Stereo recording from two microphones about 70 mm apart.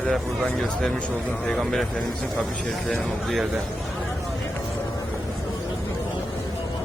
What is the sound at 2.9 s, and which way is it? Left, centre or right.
Speech, centre.